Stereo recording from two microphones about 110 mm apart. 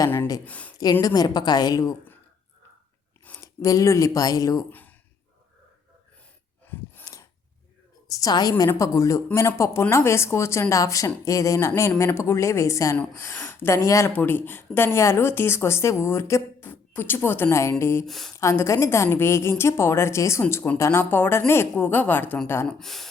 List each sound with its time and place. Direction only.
0.4 s speech: 15° left (ahead or behind)
1.0 s speech: 35° left (ahead or behind)
3.4 s speech: 30° left (ahead or behind)
7.0 s a sound: 30° left (ahead or behind)
8.1 s a woman's voice: 35° left (ahead or behind)
18.0 s speech: 5° left (ahead or behind)
18.3 s a woman's voice: 25° left (ahead or behind)
22.6 s speech: 5° left (ahead or behind)